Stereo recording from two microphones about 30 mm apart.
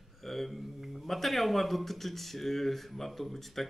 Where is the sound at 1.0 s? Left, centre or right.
Centre.